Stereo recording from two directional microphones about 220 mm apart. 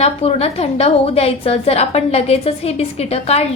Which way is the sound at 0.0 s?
30° left (ahead or behind).